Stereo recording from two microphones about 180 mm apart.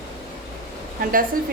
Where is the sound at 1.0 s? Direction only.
50° right (ahead or behind).